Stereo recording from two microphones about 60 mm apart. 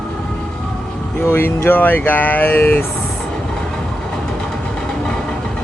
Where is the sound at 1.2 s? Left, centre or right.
Left.